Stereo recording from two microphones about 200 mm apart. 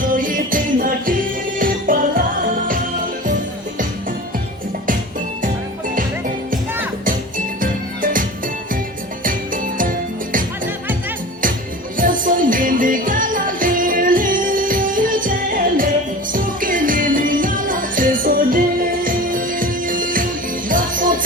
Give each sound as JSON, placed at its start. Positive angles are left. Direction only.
{"t": 0.0, "sound": "music", "side_deg": -40}
{"t": 7.0, "sound": "music", "side_deg": -45}
{"t": 11.9, "sound": "music", "side_deg": -40}